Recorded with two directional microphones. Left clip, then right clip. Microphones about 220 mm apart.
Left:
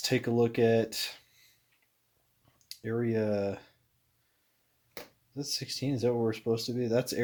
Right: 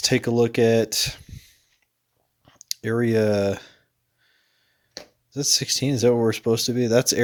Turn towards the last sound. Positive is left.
turn(degrees=-35)  # may be behind; listen again after turning